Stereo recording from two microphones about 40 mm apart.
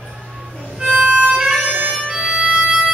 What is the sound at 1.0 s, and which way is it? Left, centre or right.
Harmonica, right.